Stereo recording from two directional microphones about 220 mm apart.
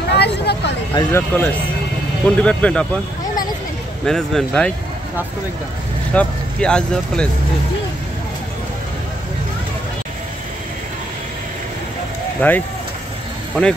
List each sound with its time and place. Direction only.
0.1 s a sound: 50° left (ahead or behind)
0.9 s speech: 10° left (ahead or behind)
4.0 s speech: centre (ahead or behind)
6.1 s speech: 5° left (ahead or behind)
12.4 s speech: 10° left (ahead or behind)